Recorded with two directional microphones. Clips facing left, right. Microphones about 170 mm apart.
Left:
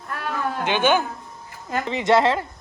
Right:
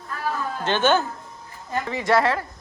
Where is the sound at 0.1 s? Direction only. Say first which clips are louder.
Left 1 dB; 70° left (ahead or behind).